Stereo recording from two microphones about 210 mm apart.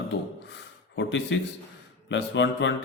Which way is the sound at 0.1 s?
60° left (ahead or behind).